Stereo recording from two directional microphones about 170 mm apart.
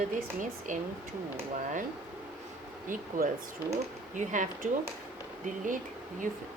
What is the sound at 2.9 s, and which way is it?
A woman's voice, 50° right (ahead or behind).